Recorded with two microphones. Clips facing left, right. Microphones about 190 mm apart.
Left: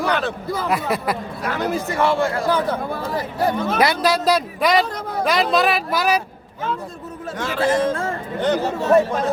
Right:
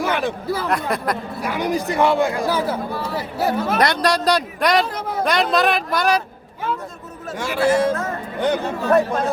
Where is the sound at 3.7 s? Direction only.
5° left (ahead or behind).